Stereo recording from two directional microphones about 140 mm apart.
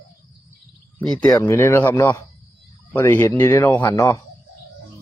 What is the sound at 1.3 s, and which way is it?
Speech, 20° left (ahead or behind).